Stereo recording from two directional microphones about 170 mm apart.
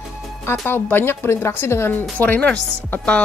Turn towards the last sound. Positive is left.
turn(degrees=10)  # may be behind; listen again after turning